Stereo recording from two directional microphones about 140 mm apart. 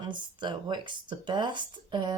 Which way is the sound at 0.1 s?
35° right (ahead or behind).